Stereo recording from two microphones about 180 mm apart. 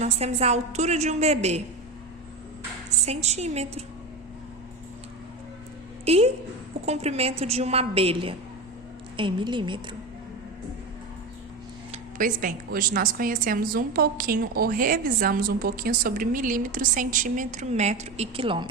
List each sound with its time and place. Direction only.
0.0 s a woman's voice: 35° right (ahead or behind)
3.1 s a woman's voice: 35° right (ahead or behind)
6.1 s a woman's voice: 35° right (ahead or behind)
11.9 s a woman's voice: 50° right (ahead or behind); by 18.7 s 30° right (ahead or behind)